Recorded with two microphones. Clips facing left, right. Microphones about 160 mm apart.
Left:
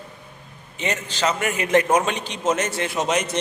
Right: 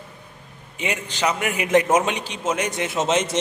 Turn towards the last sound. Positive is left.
turn(degrees=-25)  # may be behind; listen again after turning